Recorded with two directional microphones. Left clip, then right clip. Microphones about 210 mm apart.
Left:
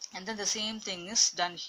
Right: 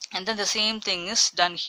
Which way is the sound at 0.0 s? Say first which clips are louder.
Right 8 dB; 30° right (ahead or behind).